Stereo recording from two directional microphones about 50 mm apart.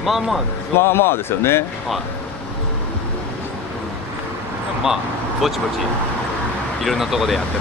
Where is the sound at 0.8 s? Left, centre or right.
Left.